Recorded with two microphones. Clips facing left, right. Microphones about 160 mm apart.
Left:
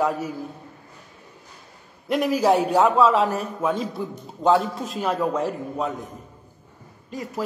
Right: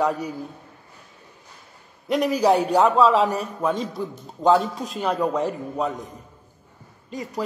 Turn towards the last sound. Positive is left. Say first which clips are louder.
# even
turn(degrees=0)  # may be behind; listen again after turning